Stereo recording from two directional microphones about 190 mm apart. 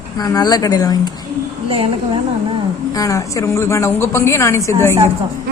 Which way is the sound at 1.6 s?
30° right (ahead or behind).